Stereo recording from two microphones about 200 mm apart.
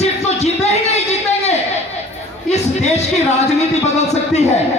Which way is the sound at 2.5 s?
35° left (ahead or behind).